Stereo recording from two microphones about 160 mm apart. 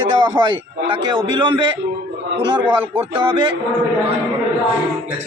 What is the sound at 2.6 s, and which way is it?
Speech, 10° right (ahead or behind).